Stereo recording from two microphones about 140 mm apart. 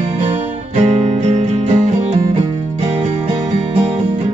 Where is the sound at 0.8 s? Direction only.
50° right (ahead or behind).